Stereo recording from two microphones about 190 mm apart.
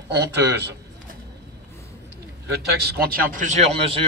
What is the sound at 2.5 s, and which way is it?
A man's voice, 55° right (ahead or behind).